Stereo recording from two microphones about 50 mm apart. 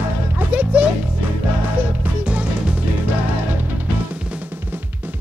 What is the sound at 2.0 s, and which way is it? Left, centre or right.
Music, right.